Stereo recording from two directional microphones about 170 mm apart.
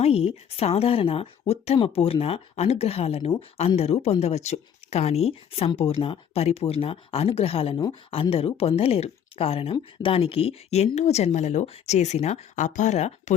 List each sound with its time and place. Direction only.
0.0 s speech: 35° left (ahead or behind)